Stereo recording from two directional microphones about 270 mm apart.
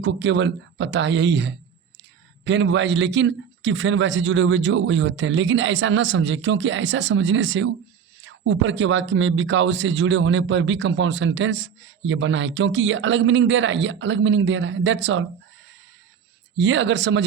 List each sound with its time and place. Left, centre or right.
0.0 s speech: right
16.6 s speech: right